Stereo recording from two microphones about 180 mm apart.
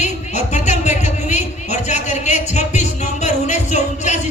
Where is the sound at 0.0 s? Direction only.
40° left (ahead or behind).